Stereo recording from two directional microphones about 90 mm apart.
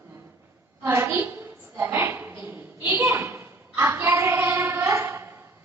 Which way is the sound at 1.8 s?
25° right (ahead or behind).